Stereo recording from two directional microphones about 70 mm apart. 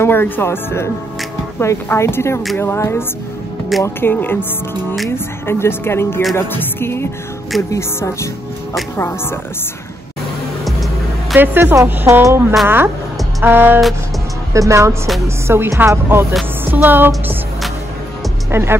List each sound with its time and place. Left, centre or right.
0.0 s speech: left
3.7 s speech: centre
4.1 s speech: left
10.6 s music: centre
11.3 s speech: right
12.1 s music: right
13.4 s speech: right
14.5 s a woman's voice: right
15.2 s music: right
16.7 s speech: right
18.5 s speech: right